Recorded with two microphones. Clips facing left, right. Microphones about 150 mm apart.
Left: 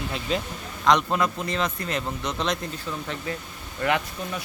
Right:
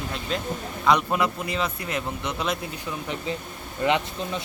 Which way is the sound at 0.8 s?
10° right (ahead or behind).